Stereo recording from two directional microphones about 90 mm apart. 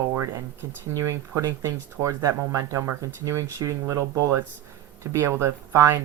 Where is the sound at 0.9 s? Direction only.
35° right (ahead or behind).